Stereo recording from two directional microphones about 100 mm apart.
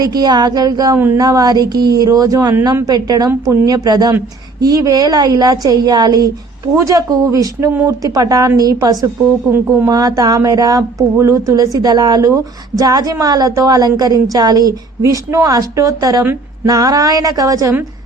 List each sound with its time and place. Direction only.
0.0 s speech: 40° right (ahead or behind)
0.9 s speech: 20° right (ahead or behind)
1.2 s speech: 40° right (ahead or behind)